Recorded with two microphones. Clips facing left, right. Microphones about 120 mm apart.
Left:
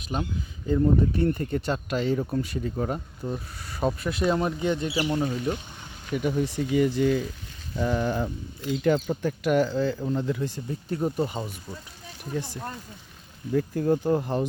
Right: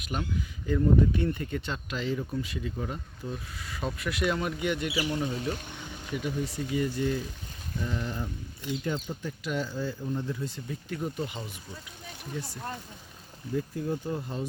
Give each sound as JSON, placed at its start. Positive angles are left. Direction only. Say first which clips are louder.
{"t": 0.1, "sound": "speech", "louder": "left 4 dB", "side_deg": 25}
{"t": 0.7, "sound": "speech", "louder": "left 2 dB", "side_deg": 40}
{"t": 6.1, "sound": "speech", "louder": "left 6 dB", "side_deg": 60}
{"t": 10.7, "sound": "speech", "louder": "left 7 dB", "side_deg": 35}
{"t": 13.5, "sound": "speech", "louder": "left 7 dB", "side_deg": 55}